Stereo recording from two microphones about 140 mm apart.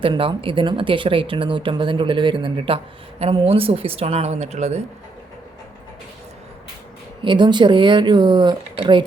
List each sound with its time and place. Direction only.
0.0 s speech: 40° right (ahead or behind)
7.2 s speech: 35° right (ahead or behind)